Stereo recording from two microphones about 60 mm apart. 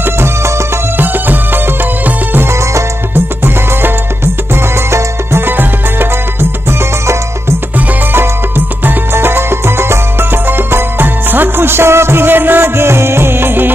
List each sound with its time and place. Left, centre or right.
0.0 s music: right
0.9 s music: right
4.9 s music: right
8.1 s music: right